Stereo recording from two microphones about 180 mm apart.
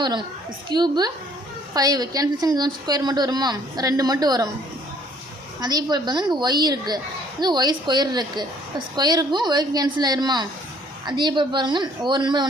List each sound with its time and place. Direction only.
0.0 s a woman's voice: 25° right (ahead or behind)
5.5 s a woman's voice: 20° right (ahead or behind)